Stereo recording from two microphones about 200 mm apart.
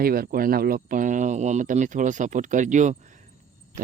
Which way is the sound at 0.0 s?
50° right (ahead or behind).